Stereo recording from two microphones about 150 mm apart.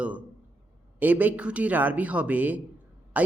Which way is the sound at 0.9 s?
10° right (ahead or behind).